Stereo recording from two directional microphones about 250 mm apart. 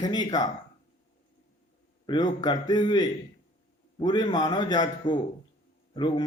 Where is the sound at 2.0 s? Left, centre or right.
Centre.